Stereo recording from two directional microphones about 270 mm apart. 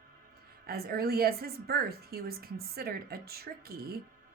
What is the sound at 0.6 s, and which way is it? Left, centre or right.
A woman's voice, right.